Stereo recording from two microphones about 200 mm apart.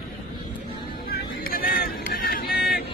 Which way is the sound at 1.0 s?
45° left (ahead or behind).